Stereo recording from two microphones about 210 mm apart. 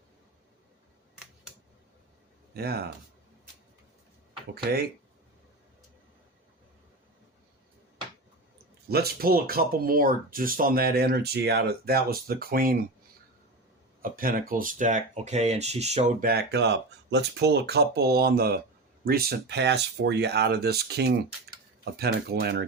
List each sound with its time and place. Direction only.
2.5 s speech: 50° right (ahead or behind)
4.5 s speech: 45° right (ahead or behind)
8.9 s speech: 50° right (ahead or behind)
14.0 s speech: 40° right (ahead or behind)
16.2 s speech: 50° right (ahead or behind)